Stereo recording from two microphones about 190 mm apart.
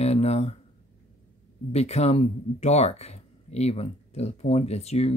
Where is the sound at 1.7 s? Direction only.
35° left (ahead or behind).